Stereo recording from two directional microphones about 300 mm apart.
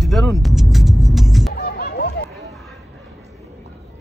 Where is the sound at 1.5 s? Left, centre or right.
Left.